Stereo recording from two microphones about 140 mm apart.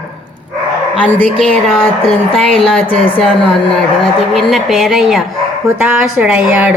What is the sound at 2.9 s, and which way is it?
Speech, 40° left (ahead or behind).